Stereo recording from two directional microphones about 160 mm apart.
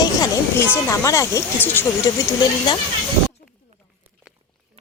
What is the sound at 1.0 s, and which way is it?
Speech, 20° left (ahead or behind).